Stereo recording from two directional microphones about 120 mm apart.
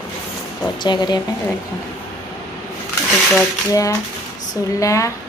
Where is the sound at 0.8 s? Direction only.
40° left (ahead or behind).